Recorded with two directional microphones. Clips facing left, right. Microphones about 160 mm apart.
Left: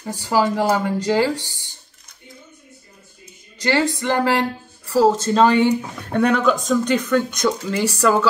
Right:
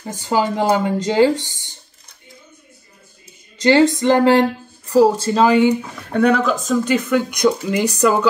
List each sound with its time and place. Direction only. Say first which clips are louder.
0.0 s speech: even; 20° right (ahead or behind)
3.5 s speech: right 7 dB; 20° right (ahead or behind)